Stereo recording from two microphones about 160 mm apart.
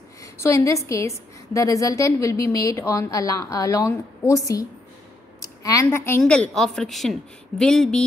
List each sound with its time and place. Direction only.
0.2 s a woman's voice: 15° left (ahead or behind)